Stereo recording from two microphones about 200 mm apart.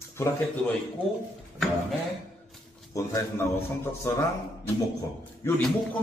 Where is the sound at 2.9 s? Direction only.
15° left (ahead or behind).